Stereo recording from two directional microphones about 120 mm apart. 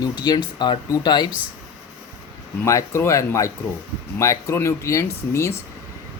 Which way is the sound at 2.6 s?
25° left (ahead or behind).